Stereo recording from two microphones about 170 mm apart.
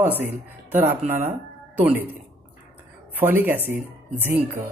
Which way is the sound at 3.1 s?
10° right (ahead or behind).